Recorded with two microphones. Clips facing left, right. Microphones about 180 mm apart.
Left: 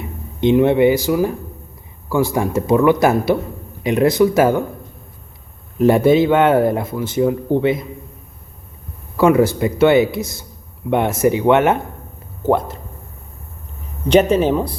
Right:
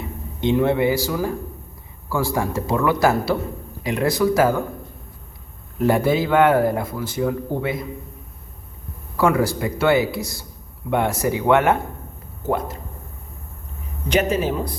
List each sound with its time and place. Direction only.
0.4 s speech: 20° left (ahead or behind)
5.8 s speech: 25° left (ahead or behind)
9.1 s speech: 20° left (ahead or behind)
14.1 s speech: 30° left (ahead or behind)